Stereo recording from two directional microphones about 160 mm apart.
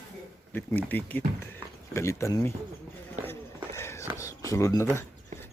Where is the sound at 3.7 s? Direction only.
15° left (ahead or behind).